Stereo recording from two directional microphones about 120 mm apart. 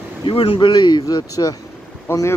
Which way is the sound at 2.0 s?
20° left (ahead or behind).